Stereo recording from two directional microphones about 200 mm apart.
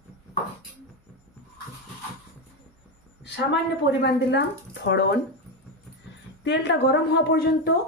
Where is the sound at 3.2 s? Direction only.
60° left (ahead or behind).